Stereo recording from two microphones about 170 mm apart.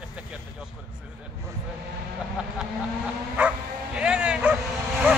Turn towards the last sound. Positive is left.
turn(degrees=-10)  # may be behind; listen again after turning